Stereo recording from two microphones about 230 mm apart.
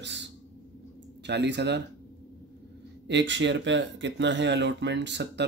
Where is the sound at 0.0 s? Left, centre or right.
Right.